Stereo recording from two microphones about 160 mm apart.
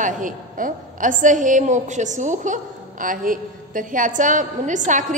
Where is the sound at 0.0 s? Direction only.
55° right (ahead or behind).